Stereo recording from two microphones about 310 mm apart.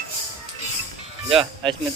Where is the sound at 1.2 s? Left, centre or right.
Centre.